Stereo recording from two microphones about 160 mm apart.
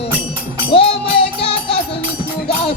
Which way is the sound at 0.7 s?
35° left (ahead or behind).